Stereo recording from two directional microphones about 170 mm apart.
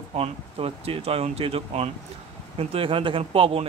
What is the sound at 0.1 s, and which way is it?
Speech, 35° right (ahead or behind).